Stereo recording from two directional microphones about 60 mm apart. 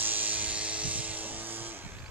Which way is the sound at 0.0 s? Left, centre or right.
Right.